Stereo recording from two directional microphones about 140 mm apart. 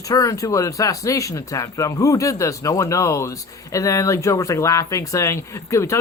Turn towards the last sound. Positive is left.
turn(degrees=20)  # may be behind; listen again after turning